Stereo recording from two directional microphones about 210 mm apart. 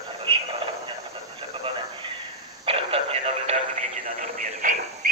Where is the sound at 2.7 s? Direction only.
25° right (ahead or behind).